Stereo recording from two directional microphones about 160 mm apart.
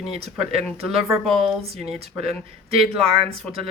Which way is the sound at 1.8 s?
40° right (ahead or behind).